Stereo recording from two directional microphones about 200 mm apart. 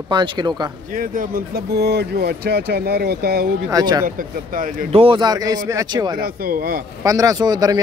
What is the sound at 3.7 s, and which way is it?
Speech, 20° right (ahead or behind).